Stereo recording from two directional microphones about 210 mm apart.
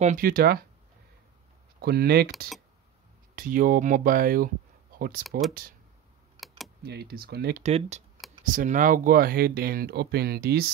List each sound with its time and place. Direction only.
0.0 s speech: 40° right (ahead or behind)
1.8 s speech: 50° right (ahead or behind)
3.3 s speech: 40° right (ahead or behind)
4.9 s a sound: 45° right (ahead or behind)
6.8 s speech: 50° right (ahead or behind)
7.6 s speech: 30° right (ahead or behind); by 10.7 s 50° right (ahead or behind)